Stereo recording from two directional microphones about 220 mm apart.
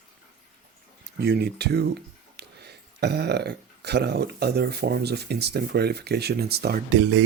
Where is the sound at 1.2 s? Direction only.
45° right (ahead or behind).